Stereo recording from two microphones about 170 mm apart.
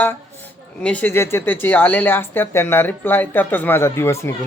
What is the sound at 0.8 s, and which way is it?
Speech, 10° left (ahead or behind).